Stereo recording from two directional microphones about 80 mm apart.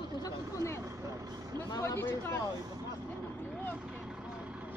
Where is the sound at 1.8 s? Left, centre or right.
Left.